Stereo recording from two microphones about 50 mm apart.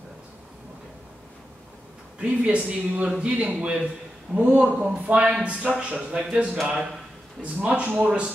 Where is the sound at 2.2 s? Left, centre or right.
Right.